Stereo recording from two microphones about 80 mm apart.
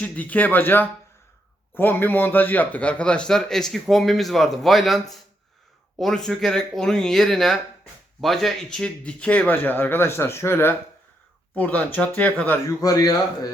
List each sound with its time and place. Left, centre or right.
0.0 s a man's voice: centre
12.8 s a man's voice: left